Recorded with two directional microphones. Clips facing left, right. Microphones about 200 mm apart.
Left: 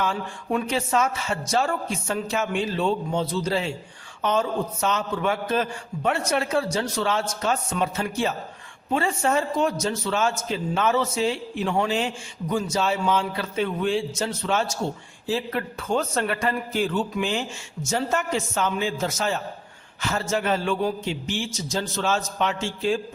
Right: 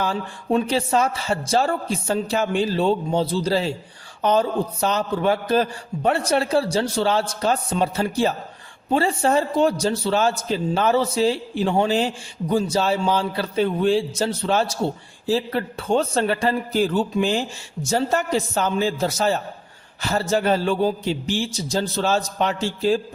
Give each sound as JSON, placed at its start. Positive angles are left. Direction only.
{"t": 0.0, "sound": "a man's voice", "side_deg": -35}